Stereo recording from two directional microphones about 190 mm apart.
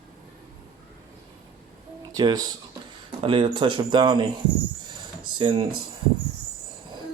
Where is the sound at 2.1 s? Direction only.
20° right (ahead or behind).